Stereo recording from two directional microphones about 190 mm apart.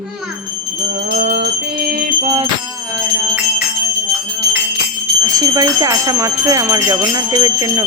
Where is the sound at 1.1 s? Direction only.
55° right (ahead or behind).